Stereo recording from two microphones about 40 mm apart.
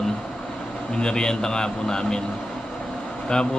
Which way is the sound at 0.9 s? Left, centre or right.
Centre.